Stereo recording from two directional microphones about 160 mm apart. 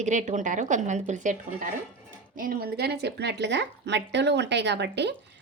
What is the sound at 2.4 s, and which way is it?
A woman's voice, 65° right (ahead or behind).